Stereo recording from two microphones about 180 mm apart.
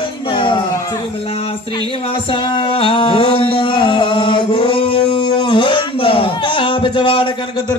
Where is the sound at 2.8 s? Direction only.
30° left (ahead or behind).